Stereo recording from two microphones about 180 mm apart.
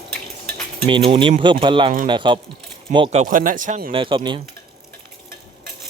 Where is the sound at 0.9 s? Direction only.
30° right (ahead or behind).